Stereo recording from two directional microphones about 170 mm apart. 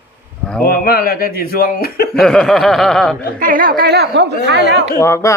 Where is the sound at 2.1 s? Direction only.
5° left (ahead or behind).